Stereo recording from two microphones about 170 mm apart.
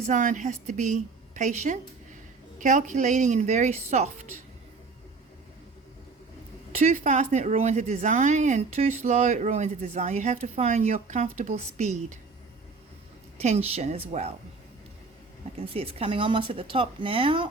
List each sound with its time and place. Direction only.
0.1 s a woman's voice: 50° right (ahead or behind)
6.7 s a woman's voice: 45° right (ahead or behind)
13.4 s speech: 40° right (ahead or behind)
15.7 s speech: 35° right (ahead or behind)